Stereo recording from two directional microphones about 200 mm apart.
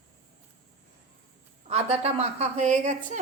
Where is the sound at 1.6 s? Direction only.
30° right (ahead or behind).